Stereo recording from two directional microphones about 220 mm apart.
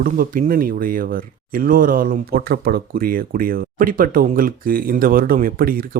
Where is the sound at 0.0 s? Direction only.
40° right (ahead or behind).